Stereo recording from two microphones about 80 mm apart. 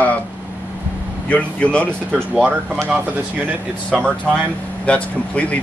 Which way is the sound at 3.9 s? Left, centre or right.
Centre.